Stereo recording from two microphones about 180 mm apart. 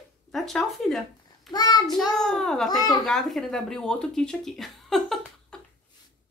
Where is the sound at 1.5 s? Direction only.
20° left (ahead or behind).